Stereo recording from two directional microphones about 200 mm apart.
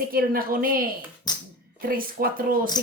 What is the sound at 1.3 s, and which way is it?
Music, 20° left (ahead or behind).